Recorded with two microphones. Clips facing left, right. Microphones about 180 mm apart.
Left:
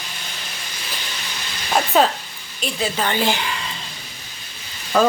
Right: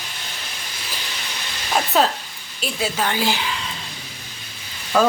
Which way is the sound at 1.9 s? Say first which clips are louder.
Left 2 dB; centre (ahead or behind).